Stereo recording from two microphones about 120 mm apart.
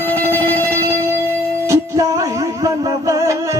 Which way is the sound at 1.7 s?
25° right (ahead or behind).